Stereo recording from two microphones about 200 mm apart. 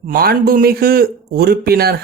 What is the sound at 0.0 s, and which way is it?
Speech, 50° right (ahead or behind).